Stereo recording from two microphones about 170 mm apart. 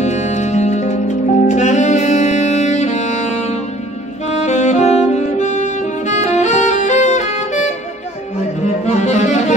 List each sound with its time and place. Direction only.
0.0 s saxophone: 45° left (ahead or behind)
4.4 s music: 45° left (ahead or behind)
8.8 s cello: 40° left (ahead or behind)